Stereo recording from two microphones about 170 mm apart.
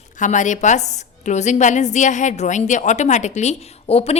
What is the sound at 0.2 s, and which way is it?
A woman's voice, 45° left (ahead or behind).